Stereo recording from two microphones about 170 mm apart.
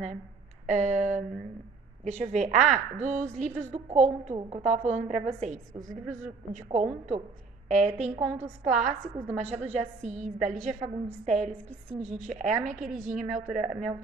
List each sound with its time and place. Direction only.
0.7 s a woman's voice: 45° right (ahead or behind)